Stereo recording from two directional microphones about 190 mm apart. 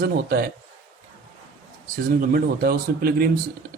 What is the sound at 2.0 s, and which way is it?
Speech, 55° right (ahead or behind).